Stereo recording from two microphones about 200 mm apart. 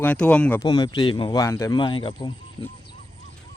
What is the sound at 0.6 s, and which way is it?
Speech, 20° left (ahead or behind).